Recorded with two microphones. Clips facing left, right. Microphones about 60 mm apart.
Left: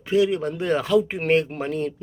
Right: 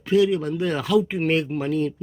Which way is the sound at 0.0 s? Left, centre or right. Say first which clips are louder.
Right 1 dB; left.